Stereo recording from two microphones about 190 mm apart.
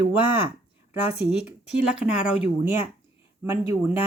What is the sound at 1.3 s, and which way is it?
Speech, 5° right (ahead or behind).